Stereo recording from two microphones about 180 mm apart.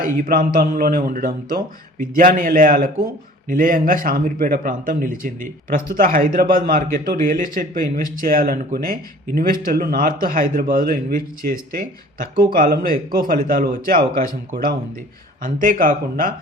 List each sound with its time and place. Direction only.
0.0 s speech: 50° right (ahead or behind)